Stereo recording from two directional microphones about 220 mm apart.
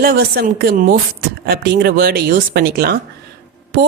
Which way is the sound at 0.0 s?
45° right (ahead or behind).